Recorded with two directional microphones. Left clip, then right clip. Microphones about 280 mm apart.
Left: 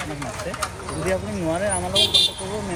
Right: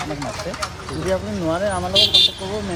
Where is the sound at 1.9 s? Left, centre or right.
Left.